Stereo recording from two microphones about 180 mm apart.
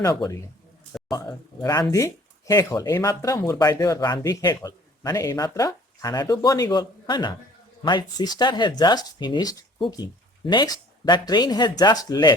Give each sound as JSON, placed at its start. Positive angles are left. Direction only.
{"t": 0.0, "sound": "speech", "side_deg": 20}